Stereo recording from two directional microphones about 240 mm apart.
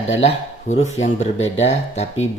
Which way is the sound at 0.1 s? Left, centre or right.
Left.